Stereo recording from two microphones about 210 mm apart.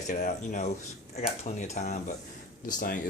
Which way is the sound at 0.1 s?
40° left (ahead or behind).